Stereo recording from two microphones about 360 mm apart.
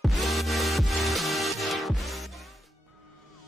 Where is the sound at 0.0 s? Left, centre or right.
Centre.